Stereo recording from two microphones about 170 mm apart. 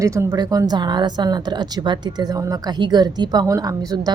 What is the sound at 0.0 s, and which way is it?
A woman's voice, 20° right (ahead or behind).